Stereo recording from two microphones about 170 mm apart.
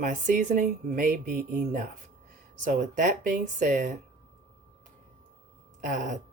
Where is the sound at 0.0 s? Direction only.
50° right (ahead or behind).